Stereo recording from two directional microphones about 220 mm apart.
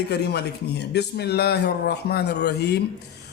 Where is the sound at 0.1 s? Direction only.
50° left (ahead or behind).